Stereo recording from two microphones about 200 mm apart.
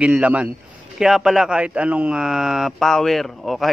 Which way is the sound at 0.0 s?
5° right (ahead or behind).